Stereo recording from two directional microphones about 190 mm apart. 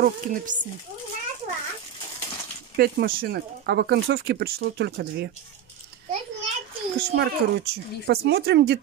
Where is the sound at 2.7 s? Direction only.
50° right (ahead or behind).